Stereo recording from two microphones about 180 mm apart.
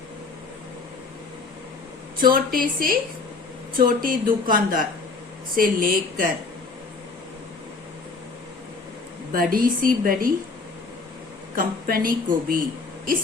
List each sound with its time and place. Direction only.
2.1 s speech: 55° right (ahead or behind)
9.3 s speech: 50° right (ahead or behind)
11.5 s speech: 55° right (ahead or behind)